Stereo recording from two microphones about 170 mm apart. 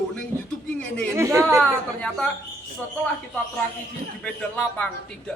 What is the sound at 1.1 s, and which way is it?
Speech, 15° right (ahead or behind).